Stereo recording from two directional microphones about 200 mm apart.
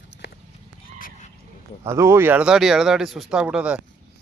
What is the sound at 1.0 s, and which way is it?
Neigh, 35° left (ahead or behind).